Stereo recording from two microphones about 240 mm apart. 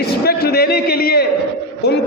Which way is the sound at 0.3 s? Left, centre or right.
Left.